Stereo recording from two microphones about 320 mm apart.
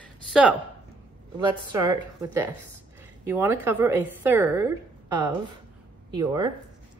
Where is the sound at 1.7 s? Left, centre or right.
Centre.